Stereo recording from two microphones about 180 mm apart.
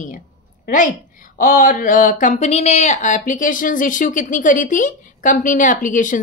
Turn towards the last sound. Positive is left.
turn(degrees=45)  # may be behind; listen again after turning